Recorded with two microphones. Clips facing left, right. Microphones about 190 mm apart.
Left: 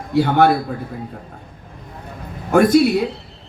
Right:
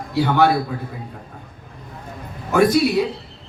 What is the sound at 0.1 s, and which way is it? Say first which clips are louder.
Speech: left 2 dB; 55° left (ahead or behind).